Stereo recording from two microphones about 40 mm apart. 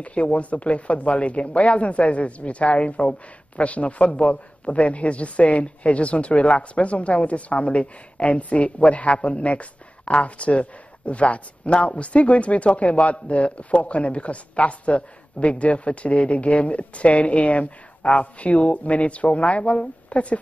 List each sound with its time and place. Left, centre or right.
0.0 s speech: left